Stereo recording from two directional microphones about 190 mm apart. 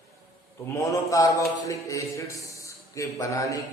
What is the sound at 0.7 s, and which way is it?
A man's voice, 15° left (ahead or behind).